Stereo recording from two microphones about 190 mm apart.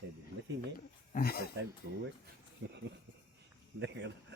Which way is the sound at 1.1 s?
55° left (ahead or behind).